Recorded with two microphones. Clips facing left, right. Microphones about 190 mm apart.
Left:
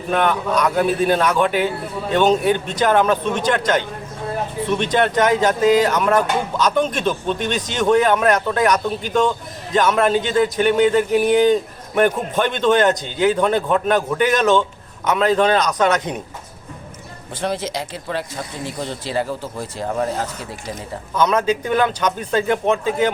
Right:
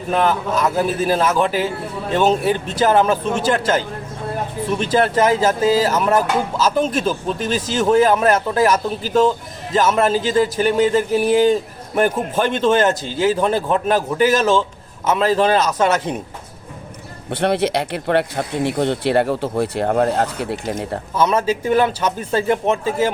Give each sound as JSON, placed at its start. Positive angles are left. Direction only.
{"t": 0.1, "sound": "speech", "side_deg": 0}
{"t": 17.3, "sound": "speech", "side_deg": -65}
{"t": 21.5, "sound": "speech", "side_deg": -5}
{"t": 22.3, "sound": "speech", "side_deg": -30}
{"t": 22.6, "sound": "speech", "side_deg": -5}